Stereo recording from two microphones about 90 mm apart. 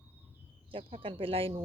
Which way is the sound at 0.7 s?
90° right.